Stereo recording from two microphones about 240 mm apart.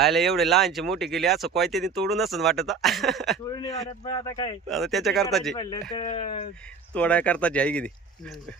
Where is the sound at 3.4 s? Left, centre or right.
Left.